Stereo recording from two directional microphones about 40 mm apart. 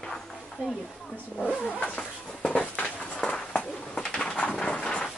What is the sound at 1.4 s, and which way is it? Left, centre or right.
Vehicle, left.